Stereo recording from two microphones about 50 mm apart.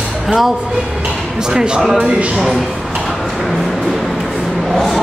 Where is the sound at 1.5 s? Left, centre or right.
Centre.